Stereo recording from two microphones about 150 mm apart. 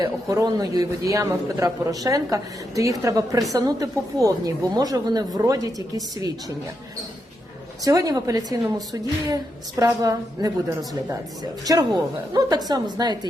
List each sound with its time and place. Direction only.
0.0 s a man's voice: 25° right (ahead or behind)
7.9 s a man's voice: 25° right (ahead or behind)